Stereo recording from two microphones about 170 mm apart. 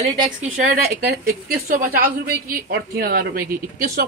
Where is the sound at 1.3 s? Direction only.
60° right (ahead or behind).